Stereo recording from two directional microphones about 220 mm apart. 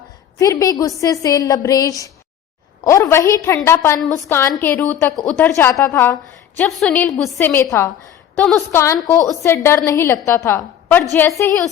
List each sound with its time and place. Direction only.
0.3 s a woman's voice: 15° left (ahead or behind)